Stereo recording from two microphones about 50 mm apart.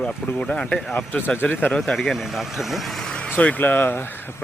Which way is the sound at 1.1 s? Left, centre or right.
Left.